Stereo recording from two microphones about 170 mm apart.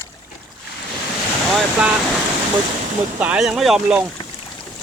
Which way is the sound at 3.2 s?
10° right (ahead or behind).